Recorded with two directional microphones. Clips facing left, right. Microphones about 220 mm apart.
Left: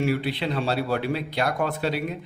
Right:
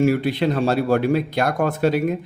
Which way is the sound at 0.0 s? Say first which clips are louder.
Right 7 dB; 45° right (ahead or behind).